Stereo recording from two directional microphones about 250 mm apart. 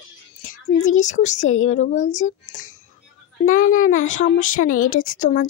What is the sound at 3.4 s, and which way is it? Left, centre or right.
Speech, left.